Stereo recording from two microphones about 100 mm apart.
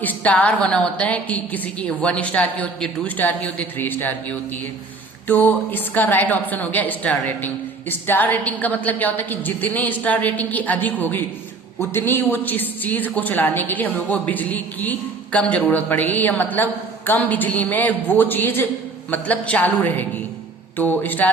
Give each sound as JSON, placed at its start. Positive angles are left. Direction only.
{"t": 0.0, "sound": "a woman's voice", "side_deg": 15}